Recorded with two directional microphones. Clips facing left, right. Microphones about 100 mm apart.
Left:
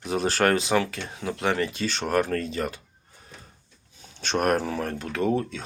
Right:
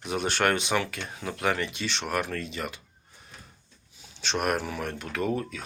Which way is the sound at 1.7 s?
40° left (ahead or behind).